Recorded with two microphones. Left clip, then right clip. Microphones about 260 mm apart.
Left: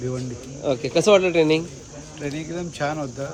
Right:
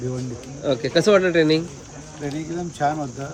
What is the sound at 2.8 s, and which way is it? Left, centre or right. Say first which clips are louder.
Speech: right 4 dB; centre.